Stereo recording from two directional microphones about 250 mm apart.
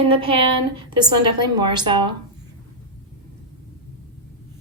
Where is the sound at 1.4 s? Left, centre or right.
Centre.